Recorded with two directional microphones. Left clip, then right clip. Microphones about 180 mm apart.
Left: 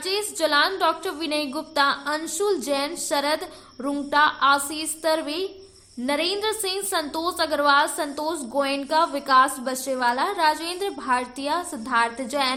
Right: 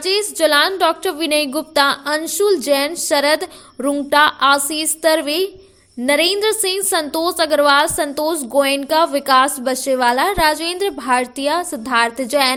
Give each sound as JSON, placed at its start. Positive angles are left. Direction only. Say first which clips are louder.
{"t": 0.0, "sound": "a woman's voice", "louder": "right 8 dB", "side_deg": -35}